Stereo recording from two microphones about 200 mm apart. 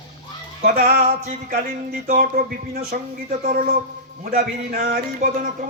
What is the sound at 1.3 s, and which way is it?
Speech, 40° right (ahead or behind).